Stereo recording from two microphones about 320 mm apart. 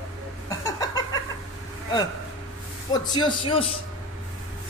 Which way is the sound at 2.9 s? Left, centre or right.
Centre.